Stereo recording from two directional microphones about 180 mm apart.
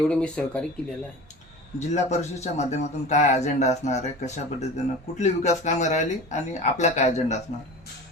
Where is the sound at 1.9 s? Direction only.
40° left (ahead or behind).